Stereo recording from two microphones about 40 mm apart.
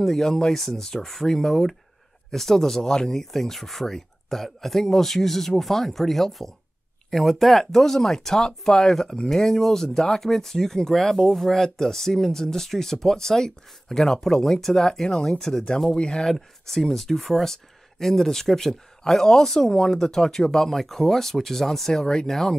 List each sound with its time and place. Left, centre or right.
0.0 s speech: centre
16.3 s speech: centre
22.0 s speech: centre
22.3 s speech: centre